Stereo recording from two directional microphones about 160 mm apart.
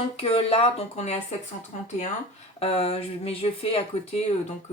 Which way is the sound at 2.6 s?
40° left (ahead or behind).